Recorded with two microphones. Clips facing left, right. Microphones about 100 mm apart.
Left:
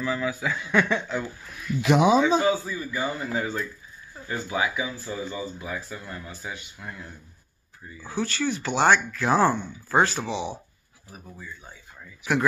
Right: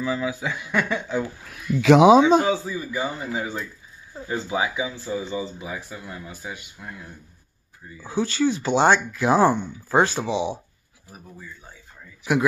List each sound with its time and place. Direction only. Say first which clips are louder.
0.0 s speech: right 1 dB; 20° right (ahead or behind)
0.7 s speech: left 2 dB; 5° right (ahead or behind)
1.9 s speech: right 6 dB; 90° right
2.5 s a man's voice: right 3 dB; 25° right (ahead or behind); by 7.1 s 5° right (ahead or behind)
8.0 s speech: right 5 dB; 20° right (ahead or behind)